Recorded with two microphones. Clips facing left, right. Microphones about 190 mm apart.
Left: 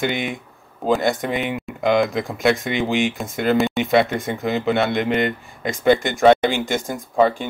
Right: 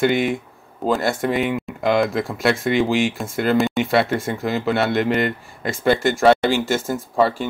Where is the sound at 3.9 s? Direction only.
20° left (ahead or behind).